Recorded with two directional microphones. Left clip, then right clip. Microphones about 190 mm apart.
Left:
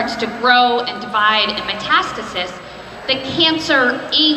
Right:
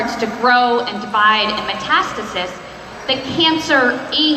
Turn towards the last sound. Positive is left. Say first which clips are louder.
# even
turn(degrees=-25)  # may be behind; listen again after turning